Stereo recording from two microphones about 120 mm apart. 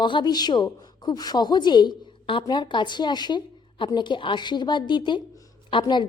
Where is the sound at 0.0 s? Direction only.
40° left (ahead or behind).